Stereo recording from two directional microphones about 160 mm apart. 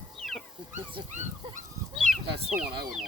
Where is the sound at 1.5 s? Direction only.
50° right (ahead or behind).